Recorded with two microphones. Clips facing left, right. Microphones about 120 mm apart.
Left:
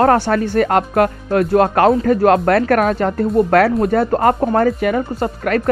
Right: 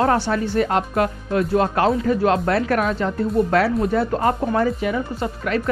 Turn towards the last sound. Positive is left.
turn(degrees=55)  # may be behind; listen again after turning